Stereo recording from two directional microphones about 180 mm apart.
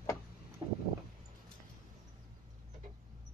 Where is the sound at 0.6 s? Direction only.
25° right (ahead or behind).